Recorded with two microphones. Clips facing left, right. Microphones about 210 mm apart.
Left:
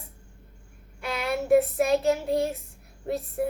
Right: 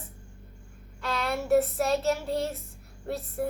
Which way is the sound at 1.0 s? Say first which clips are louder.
Left 2 dB; 15° left (ahead or behind).